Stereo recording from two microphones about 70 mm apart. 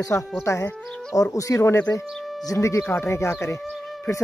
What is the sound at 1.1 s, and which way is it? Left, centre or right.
Speech, left.